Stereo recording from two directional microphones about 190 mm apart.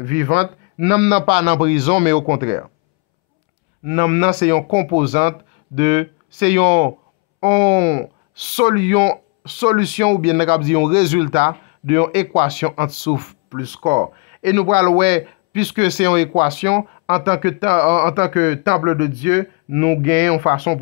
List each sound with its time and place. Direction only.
0.0 s speech: 40° right (ahead or behind)
3.8 s speech: 30° right (ahead or behind)
7.4 s speech: 20° right (ahead or behind); by 20.8 s 40° right (ahead or behind)